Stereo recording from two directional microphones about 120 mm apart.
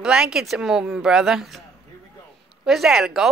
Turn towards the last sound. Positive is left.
turn(degrees=-5)  # may be behind; listen again after turning